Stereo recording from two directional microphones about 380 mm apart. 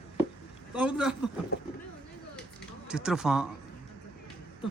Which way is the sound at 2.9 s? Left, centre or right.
Centre.